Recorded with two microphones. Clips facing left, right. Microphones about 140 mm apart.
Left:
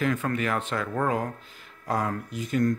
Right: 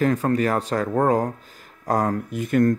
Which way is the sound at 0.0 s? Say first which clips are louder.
Right 6 dB; 40° right (ahead or behind).